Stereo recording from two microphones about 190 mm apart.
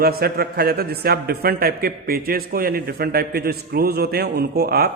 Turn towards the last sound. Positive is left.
turn(degrees=-55)  # may be behind; listen again after turning